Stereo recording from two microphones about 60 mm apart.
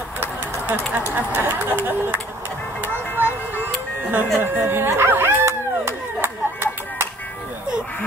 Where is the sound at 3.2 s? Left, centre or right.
Left.